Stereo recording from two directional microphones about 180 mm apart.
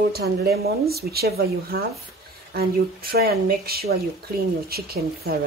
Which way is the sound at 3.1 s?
60° right (ahead or behind).